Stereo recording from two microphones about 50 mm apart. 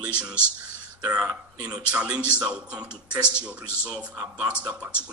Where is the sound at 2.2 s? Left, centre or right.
Right.